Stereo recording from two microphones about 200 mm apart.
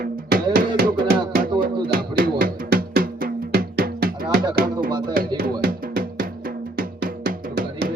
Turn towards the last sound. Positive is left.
turn(degrees=-45)  # may be behind; listen again after turning